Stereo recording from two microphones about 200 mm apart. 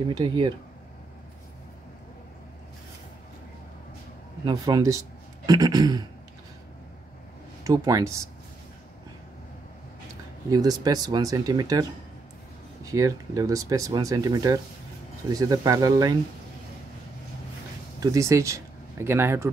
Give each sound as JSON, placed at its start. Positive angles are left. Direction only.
{"t": 0.1, "sound": "speech", "side_deg": -20}
{"t": 4.5, "sound": "speech", "side_deg": -20}
{"t": 7.6, "sound": "speech", "side_deg": -15}
{"t": 10.5, "sound": "speech", "side_deg": -20}
{"t": 12.8, "sound": "speech", "side_deg": -15}
{"t": 18.0, "sound": "speech", "side_deg": -15}